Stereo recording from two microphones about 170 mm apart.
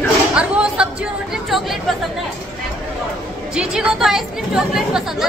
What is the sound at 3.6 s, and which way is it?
A woman's voice, 5° right (ahead or behind).